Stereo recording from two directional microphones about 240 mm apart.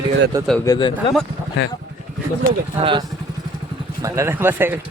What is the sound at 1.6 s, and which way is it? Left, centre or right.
Speech, left.